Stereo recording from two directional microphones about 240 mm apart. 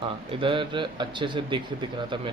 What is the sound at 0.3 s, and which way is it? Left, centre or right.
A man's voice, right.